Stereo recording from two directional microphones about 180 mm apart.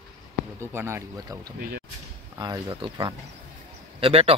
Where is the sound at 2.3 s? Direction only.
20° right (ahead or behind).